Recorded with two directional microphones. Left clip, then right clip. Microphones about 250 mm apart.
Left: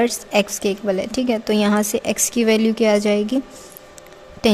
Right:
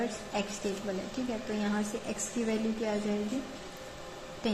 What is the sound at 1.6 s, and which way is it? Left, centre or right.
A woman's voice, left.